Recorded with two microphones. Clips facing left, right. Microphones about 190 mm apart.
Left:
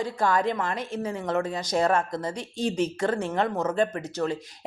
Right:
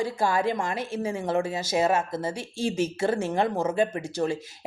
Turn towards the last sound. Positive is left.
turn(degrees=-10)  # may be behind; listen again after turning